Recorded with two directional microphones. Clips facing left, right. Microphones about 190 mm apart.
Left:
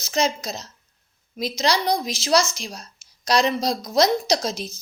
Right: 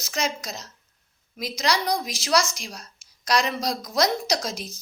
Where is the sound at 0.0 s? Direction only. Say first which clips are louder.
Left 5 dB; 30° left (ahead or behind).